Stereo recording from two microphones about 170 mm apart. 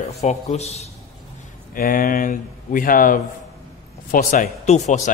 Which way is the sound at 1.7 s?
55° left (ahead or behind).